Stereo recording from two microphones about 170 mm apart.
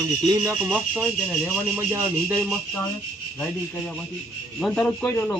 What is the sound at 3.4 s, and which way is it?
A man's voice, 5° left (ahead or behind).